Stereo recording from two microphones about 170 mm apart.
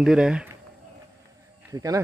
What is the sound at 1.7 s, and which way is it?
Speech, 20° right (ahead or behind).